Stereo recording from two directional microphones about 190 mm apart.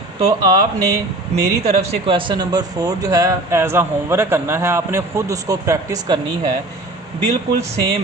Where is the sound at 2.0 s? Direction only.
25° right (ahead or behind).